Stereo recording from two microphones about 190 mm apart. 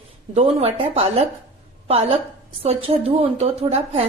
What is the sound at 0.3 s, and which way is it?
A woman's voice, 30° right (ahead or behind).